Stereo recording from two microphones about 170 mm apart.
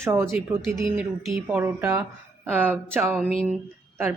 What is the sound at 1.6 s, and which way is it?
Speech, 15° right (ahead or behind).